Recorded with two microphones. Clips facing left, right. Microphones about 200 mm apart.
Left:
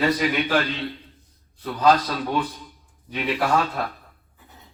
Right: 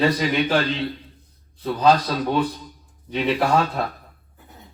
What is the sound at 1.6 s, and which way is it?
A man's voice, 20° right (ahead or behind).